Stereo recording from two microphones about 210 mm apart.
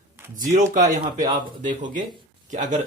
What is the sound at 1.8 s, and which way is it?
Speech, 40° right (ahead or behind).